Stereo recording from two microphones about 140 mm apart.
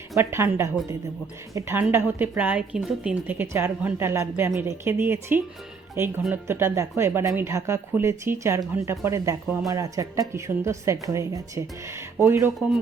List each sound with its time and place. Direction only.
0.2 s a woman's voice: 15° right (ahead or behind)